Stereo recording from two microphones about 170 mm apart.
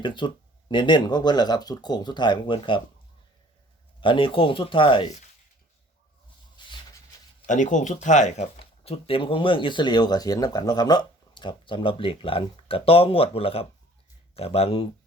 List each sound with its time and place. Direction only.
0.0 s speech: 30° left (ahead or behind)
4.0 s speech: 30° left (ahead or behind)
7.4 s speech: 45° left (ahead or behind)